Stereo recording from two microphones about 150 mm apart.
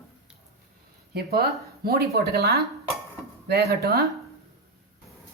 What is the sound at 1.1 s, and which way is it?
Speech, 90° right.